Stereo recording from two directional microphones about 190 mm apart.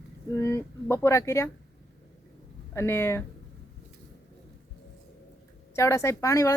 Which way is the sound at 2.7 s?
15° left (ahead or behind).